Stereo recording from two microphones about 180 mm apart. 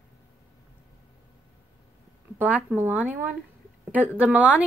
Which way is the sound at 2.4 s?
10° right (ahead or behind).